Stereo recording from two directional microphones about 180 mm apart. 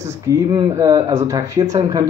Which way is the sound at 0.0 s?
20° right (ahead or behind).